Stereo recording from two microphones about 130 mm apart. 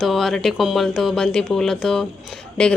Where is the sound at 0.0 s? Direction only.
Centre (ahead or behind).